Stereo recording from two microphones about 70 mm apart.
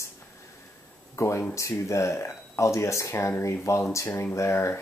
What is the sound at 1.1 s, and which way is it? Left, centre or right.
Speech, left.